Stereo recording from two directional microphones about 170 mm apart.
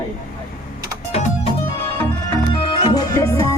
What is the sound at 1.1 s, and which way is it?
Music, 35° left (ahead or behind).